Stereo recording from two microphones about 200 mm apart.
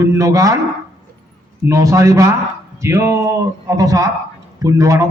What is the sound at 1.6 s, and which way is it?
A man's voice, 15° right (ahead or behind).